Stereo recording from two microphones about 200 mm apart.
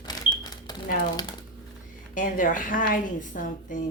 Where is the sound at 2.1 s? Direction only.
40° left (ahead or behind).